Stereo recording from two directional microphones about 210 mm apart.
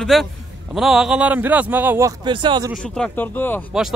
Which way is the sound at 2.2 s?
20° right (ahead or behind).